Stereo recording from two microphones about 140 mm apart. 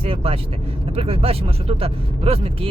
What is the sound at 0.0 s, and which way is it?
Speech, 45° right (ahead or behind).